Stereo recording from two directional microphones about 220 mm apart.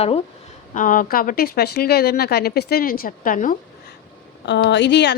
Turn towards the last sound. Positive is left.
turn(degrees=50)  # may be behind; listen again after turning